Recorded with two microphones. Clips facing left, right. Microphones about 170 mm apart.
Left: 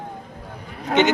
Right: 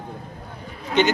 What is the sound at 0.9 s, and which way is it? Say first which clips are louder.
Speech: left 2 dB; 60° left (ahead or behind).